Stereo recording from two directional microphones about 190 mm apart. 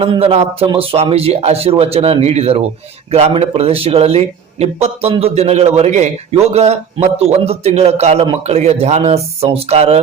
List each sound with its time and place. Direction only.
0.0 s speech: 30° right (ahead or behind)